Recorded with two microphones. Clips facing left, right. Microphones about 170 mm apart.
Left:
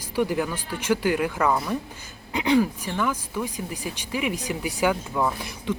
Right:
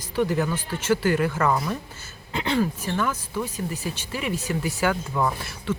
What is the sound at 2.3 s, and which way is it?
Speech, 15° left (ahead or behind).